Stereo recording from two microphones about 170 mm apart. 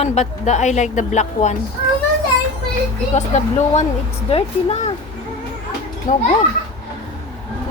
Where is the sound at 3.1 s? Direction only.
45° left (ahead or behind).